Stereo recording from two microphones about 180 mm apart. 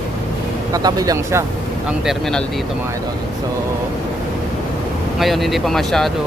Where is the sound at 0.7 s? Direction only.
20° right (ahead or behind).